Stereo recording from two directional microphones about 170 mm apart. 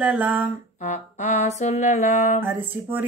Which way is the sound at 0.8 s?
45° left (ahead or behind).